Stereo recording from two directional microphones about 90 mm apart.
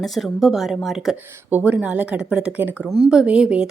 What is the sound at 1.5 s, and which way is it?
Speech, 15° right (ahead or behind).